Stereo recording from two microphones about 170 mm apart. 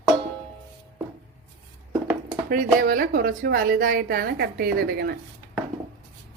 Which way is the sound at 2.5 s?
55° right (ahead or behind).